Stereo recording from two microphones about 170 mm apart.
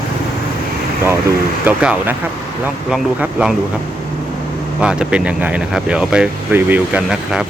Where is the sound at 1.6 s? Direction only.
10° right (ahead or behind).